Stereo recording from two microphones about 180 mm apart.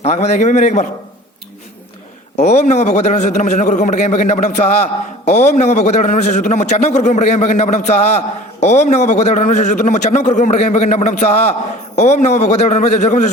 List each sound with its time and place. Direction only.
0.0 s a man's voice: 40° left (ahead or behind)
2.3 s a man's voice: 40° left (ahead or behind)